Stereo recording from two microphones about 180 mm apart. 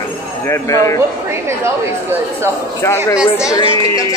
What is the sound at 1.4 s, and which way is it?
Speech, 15° right (ahead or behind).